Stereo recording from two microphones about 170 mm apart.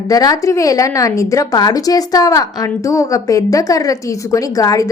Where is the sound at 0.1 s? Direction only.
20° left (ahead or behind).